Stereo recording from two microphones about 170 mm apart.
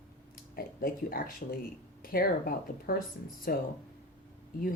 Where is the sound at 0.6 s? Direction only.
60° left (ahead or behind).